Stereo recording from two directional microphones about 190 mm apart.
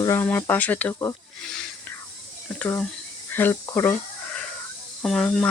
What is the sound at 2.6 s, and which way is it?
Speech, 5° left (ahead or behind).